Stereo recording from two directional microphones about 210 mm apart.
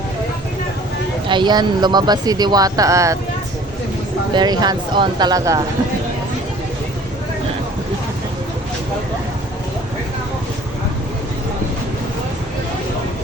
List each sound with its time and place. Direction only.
1.3 s speech: 20° right (ahead or behind)
4.4 s speech: 20° right (ahead or behind)